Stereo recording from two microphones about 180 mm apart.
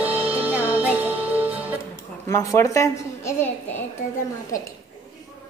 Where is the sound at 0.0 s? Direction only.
10° right (ahead or behind).